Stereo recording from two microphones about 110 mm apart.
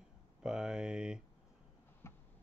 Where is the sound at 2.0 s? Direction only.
25° left (ahead or behind).